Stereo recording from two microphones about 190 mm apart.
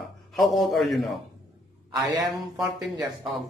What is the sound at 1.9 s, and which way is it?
Speech, 20° right (ahead or behind).